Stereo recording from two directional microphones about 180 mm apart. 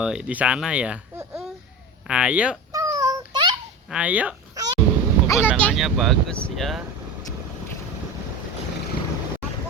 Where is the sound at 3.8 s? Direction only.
5° right (ahead or behind).